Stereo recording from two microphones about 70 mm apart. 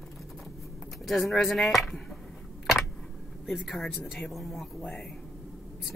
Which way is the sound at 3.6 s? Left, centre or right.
Centre.